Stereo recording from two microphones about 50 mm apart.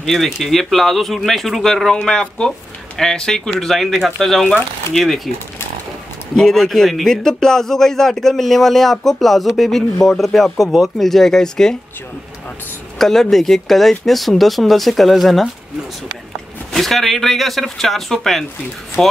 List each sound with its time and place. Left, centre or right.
0.0 s speech: centre
6.3 s speech: centre
13.0 s speech: centre
16.7 s speech: centre
19.0 s speech: centre